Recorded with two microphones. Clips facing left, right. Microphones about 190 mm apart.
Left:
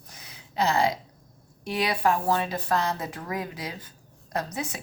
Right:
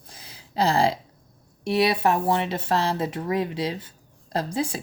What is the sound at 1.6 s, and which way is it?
Speech, 25° right (ahead or behind).